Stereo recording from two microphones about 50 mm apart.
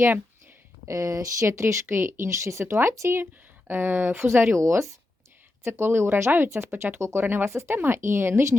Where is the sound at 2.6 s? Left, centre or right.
Right.